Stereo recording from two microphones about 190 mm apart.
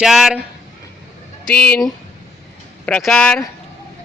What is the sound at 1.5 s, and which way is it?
A man's voice, 5° left (ahead or behind).